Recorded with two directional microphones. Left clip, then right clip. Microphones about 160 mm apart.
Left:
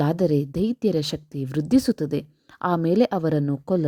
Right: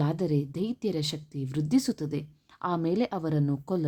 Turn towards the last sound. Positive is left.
turn(degrees=35)  # may be behind; listen again after turning